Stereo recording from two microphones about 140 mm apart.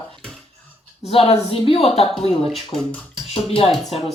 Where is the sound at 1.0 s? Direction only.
45° left (ahead or behind).